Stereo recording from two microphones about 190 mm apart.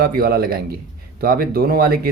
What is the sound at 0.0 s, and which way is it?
Speech, 55° right (ahead or behind).